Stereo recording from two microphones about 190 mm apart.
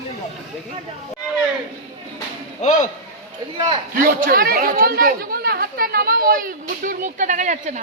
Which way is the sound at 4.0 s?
50° right (ahead or behind).